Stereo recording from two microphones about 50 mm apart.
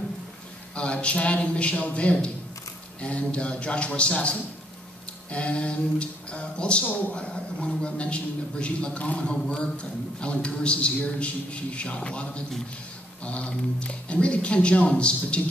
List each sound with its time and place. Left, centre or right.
0.7 s a man's voice: left